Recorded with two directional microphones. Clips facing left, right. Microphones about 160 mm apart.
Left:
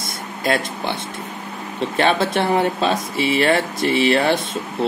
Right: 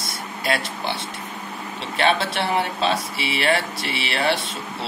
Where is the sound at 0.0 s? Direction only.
50° left (ahead or behind).